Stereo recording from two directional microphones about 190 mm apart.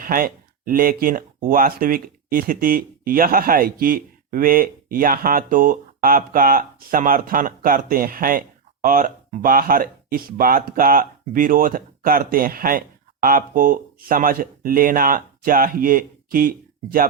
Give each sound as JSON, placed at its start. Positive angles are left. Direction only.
{"t": 0.0, "sound": "speech", "side_deg": -50}